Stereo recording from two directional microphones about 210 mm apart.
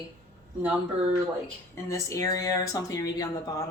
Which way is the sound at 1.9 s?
15° left (ahead or behind).